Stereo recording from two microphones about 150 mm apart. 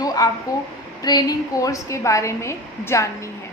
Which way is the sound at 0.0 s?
25° left (ahead or behind).